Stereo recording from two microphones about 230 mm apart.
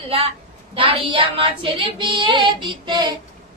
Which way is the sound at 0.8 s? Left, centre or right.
Right.